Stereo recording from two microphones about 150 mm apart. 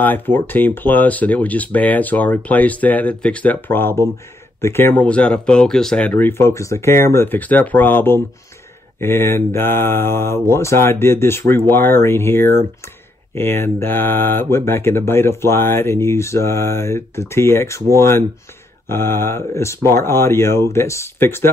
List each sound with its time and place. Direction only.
0.0 s speech: 15° left (ahead or behind)